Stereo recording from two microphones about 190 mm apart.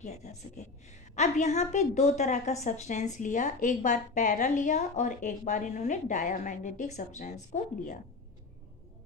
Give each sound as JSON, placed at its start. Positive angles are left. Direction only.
{"t": 0.0, "sound": "a woman's voice", "side_deg": 35}